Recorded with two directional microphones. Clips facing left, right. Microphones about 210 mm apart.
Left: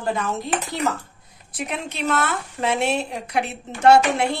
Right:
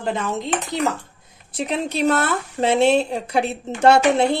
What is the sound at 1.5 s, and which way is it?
Speech, 30° right (ahead or behind).